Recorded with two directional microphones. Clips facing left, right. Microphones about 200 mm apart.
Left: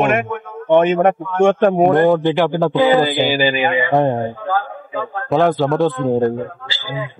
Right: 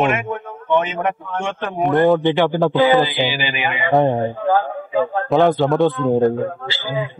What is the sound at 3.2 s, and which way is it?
Speech, 40° left (ahead or behind).